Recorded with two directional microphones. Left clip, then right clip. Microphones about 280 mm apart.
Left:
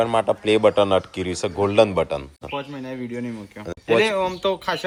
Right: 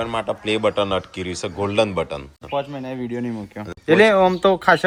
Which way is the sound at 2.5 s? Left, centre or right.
Right.